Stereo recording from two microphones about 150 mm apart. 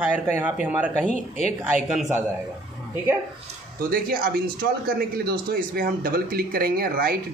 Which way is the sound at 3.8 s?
75° right (ahead or behind).